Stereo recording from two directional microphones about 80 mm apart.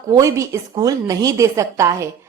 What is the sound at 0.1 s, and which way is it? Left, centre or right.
A woman's voice, right.